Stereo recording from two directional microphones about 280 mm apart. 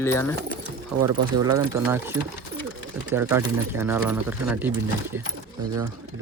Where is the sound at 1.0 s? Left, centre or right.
Right.